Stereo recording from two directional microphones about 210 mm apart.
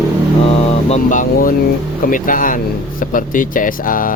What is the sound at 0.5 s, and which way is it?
Vehicle, 30° left (ahead or behind).